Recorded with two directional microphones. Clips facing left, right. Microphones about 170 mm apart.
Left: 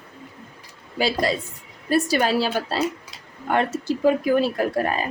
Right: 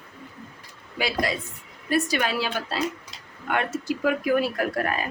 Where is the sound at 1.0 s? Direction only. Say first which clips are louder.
Left 4 dB; 30° left (ahead or behind).